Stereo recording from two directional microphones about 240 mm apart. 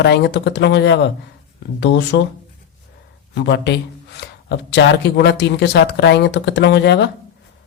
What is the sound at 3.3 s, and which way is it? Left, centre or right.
Speech, left.